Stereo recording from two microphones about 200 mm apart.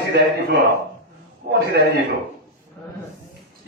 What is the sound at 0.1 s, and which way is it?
Speech, 50° right (ahead or behind).